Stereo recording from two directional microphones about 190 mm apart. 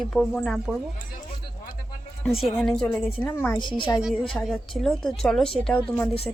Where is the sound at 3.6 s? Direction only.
25° left (ahead or behind).